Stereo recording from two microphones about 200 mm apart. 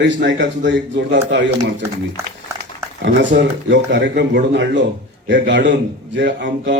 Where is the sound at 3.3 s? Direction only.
55° right (ahead or behind).